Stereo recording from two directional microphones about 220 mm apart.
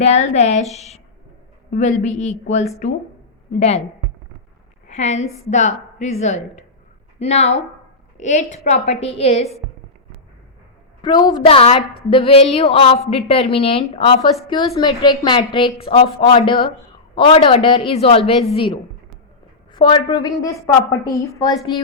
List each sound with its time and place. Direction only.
0.0 s a woman's voice: 30° left (ahead or behind)
4.9 s a woman's voice: 30° left (ahead or behind)
11.0 s a woman's voice: 20° left (ahead or behind)